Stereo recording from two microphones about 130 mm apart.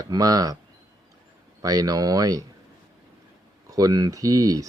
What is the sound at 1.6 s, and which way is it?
Speech, 30° right (ahead or behind).